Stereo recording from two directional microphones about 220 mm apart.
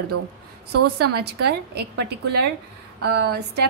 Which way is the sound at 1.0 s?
45° right (ahead or behind).